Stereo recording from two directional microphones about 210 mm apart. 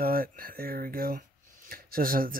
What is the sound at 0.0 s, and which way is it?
Speech, 45° right (ahead or behind).